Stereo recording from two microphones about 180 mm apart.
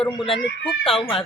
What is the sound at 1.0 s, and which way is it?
Speech, 30° left (ahead or behind).